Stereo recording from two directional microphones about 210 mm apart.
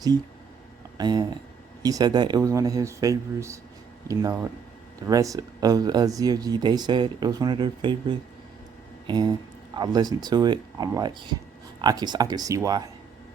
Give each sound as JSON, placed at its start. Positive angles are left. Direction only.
{"t": 0.9, "sound": "speech", "side_deg": -20}